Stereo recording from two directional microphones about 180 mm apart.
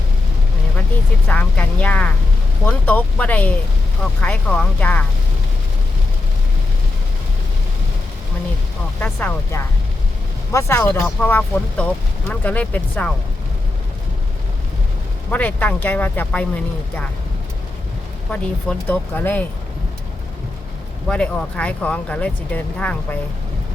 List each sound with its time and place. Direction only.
1.3 s speech: 10° left (ahead or behind)
9.0 s speech: 10° left (ahead or behind)
15.3 s speech: 10° left (ahead or behind)
18.3 s speech: 5° left (ahead or behind)
21.1 s speech: 5° left (ahead or behind)